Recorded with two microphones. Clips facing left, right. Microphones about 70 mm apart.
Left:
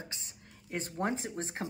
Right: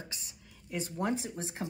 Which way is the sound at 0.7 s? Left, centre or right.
Left.